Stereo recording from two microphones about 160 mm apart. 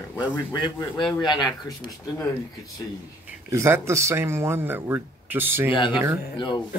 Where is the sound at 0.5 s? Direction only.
30° left (ahead or behind).